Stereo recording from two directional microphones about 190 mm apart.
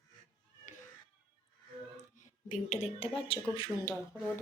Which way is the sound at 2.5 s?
35° left (ahead or behind).